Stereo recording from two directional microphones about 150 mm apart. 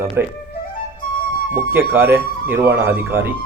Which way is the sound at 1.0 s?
65° left (ahead or behind).